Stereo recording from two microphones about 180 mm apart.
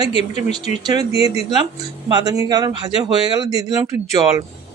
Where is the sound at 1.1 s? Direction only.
35° left (ahead or behind).